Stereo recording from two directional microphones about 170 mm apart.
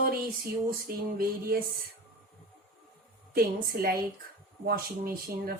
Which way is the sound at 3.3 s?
60° right (ahead or behind).